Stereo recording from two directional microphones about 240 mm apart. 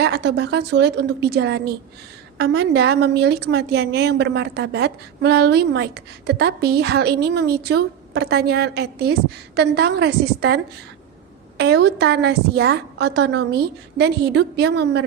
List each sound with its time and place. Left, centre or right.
0.0 s a woman's voice: right